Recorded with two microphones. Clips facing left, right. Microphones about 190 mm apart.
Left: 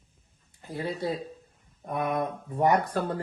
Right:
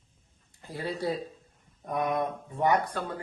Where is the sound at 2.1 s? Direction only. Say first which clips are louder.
Left 1 dB; 35° left (ahead or behind).